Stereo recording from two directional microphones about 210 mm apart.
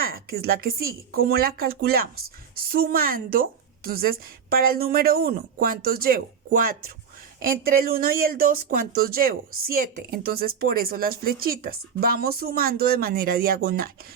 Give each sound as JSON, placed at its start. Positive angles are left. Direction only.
{"t": 0.0, "sound": "speech", "side_deg": -45}